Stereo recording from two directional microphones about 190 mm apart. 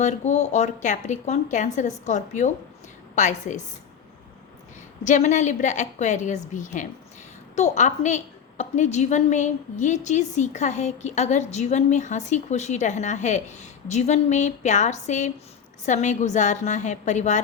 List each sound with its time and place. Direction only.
0.0 s a woman's voice: 35° left (ahead or behind)
5.0 s a woman's voice: 40° left (ahead or behind)